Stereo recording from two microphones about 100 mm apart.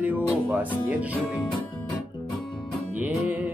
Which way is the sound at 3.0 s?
15° right (ahead or behind).